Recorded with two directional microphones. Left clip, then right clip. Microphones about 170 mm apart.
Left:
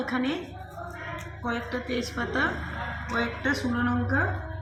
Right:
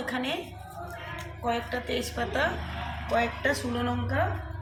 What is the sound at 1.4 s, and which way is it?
A woman's voice, 90° right.